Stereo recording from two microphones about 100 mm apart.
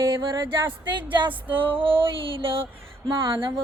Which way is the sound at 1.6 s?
60° right (ahead or behind).